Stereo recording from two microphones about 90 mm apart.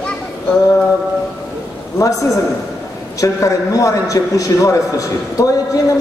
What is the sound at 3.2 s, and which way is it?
A man's voice, 40° left (ahead or behind).